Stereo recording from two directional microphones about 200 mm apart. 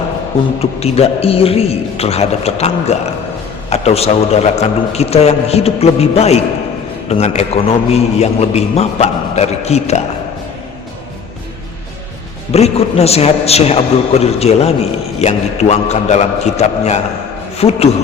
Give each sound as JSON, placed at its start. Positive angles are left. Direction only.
{"t": 0.6, "sound": "a man's voice", "side_deg": 30}
{"t": 12.5, "sound": "a man's voice", "side_deg": 30}